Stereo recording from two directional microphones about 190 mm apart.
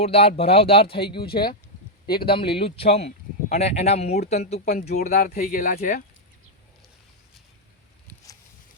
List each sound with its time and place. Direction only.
0.0 s speech: 30° left (ahead or behind)
1.2 s speech: 55° left (ahead or behind)
2.3 s speech: 30° left (ahead or behind)
5.1 s speech: 45° left (ahead or behind)